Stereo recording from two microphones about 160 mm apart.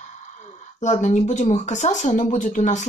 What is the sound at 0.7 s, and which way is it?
Speech, 50° left (ahead or behind).